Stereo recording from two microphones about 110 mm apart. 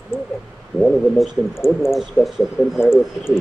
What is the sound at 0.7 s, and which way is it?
A man's voice, 5° left (ahead or behind).